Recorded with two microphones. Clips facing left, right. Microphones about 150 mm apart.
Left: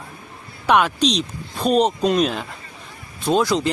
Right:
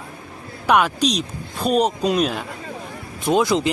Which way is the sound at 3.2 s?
20° right (ahead or behind).